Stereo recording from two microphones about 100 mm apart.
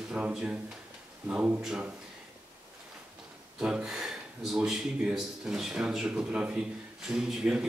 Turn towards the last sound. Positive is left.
turn(degrees=-10)  # may be behind; listen again after turning